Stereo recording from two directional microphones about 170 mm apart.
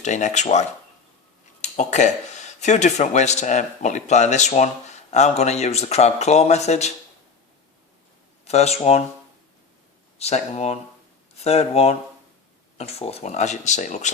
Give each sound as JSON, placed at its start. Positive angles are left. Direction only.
{"t": 0.0, "sound": "speech", "side_deg": 45}
{"t": 8.4, "sound": "speech", "side_deg": 40}
{"t": 10.2, "sound": "speech", "side_deg": 40}